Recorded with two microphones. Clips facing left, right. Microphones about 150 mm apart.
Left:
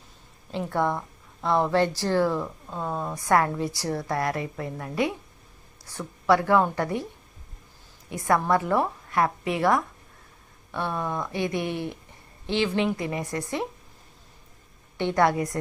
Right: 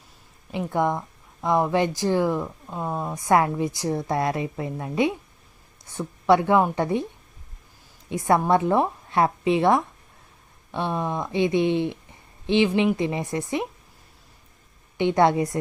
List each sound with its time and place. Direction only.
0.5 s a woman's voice: 15° right (ahead or behind)
8.1 s a woman's voice: 25° right (ahead or behind)
14.9 s a woman's voice: 20° right (ahead or behind)